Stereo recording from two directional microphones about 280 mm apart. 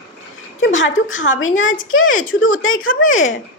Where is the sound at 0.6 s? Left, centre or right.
Left.